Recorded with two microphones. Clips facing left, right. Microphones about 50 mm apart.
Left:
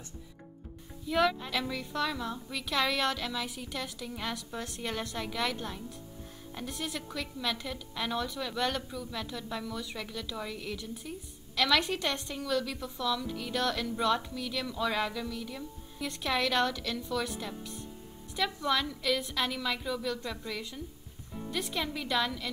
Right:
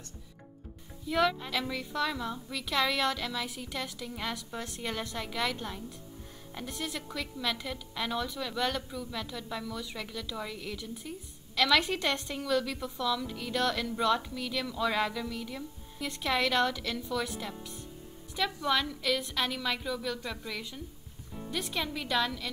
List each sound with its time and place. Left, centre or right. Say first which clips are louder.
1.0 s a woman's voice: even; centre
6.5 s a woman's voice: even; centre
11.8 s a woman's voice: right 1 dB; right
12.6 s a woman's voice: right 1 dB; centre